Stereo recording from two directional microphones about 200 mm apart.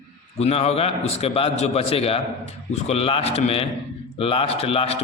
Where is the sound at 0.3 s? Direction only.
30° left (ahead or behind).